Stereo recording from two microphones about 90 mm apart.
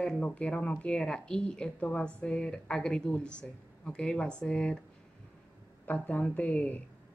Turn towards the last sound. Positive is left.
turn(degrees=20)  # may be behind; listen again after turning